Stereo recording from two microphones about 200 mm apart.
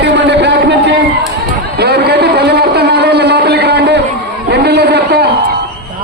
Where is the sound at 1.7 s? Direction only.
55° right (ahead or behind).